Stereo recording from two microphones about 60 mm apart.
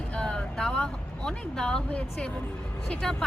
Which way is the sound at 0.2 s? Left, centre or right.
Centre.